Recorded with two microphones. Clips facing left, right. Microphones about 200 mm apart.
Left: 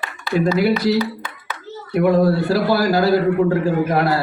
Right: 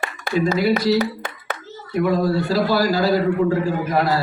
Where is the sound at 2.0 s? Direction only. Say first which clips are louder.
Left 4 dB; 55° left (ahead or behind).